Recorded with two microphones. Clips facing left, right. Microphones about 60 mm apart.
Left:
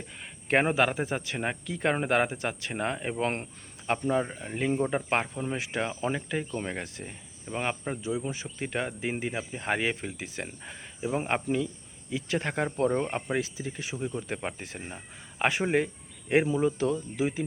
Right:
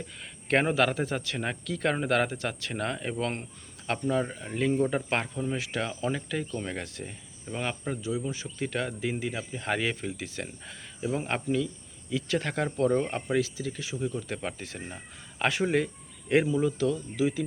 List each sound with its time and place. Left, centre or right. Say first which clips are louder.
0.4 s speech: even; centre